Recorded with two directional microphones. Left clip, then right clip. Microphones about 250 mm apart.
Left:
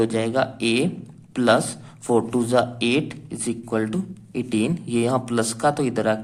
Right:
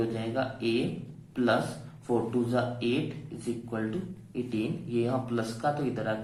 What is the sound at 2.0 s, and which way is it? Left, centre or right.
A man's voice, left.